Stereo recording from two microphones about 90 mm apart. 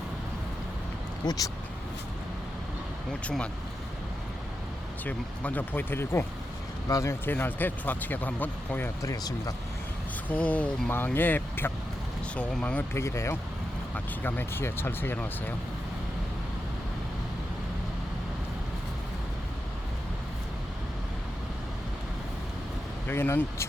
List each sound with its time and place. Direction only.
1.2 s speech: 50° left (ahead or behind)
3.1 s speech: 10° left (ahead or behind)
5.0 s speech: 15° left (ahead or behind)
6.8 s speech: 40° left (ahead or behind)
7.1 s speech: 20° left (ahead or behind)
9.0 s speech: 40° left (ahead or behind)
10.2 s speech: 15° left (ahead or behind)
12.9 s speech: 30° left (ahead or behind)
13.9 s speech: 20° left (ahead or behind)
23.0 s speech: 25° left (ahead or behind)